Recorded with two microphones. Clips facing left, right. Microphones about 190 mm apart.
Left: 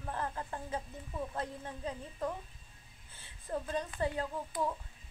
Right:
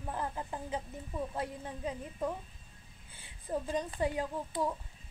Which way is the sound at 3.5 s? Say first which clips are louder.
Right 2 dB; 10° right (ahead or behind).